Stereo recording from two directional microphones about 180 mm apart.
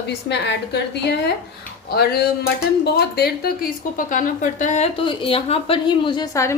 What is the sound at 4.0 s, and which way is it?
Speech, 50° left (ahead or behind).